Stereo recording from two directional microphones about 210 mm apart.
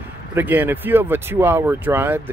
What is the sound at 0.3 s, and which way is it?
Speech, 10° right (ahead or behind).